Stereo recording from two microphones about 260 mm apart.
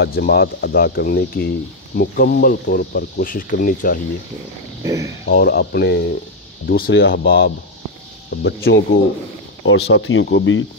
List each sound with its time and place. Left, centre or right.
0.0 s speech: left
4.8 s speech: centre
5.2 s speech: left